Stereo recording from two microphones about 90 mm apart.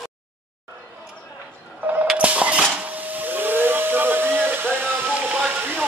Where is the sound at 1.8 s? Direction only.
20° right (ahead or behind).